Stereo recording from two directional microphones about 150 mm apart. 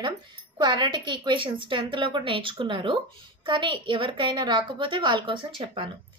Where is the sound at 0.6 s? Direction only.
30° right (ahead or behind).